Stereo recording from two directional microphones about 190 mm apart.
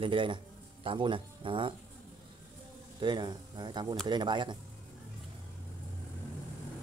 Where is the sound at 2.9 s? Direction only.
25° right (ahead or behind).